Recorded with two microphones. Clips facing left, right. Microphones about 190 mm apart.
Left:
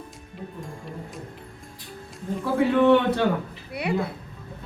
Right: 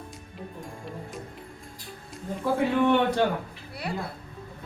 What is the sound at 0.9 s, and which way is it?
Music, centre (ahead or behind).